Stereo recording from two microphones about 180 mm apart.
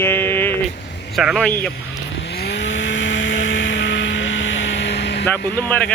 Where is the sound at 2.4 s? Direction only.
70° left (ahead or behind).